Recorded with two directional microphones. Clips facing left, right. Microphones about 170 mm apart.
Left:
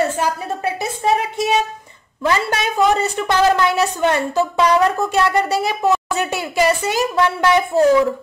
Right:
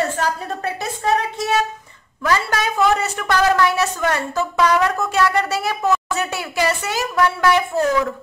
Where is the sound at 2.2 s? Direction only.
25° left (ahead or behind).